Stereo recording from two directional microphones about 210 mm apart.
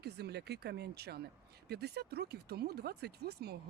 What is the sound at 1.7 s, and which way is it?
Speech, 50° right (ahead or behind).